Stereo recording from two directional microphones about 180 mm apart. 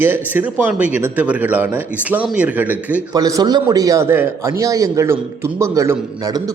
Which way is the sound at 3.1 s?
20° right (ahead or behind).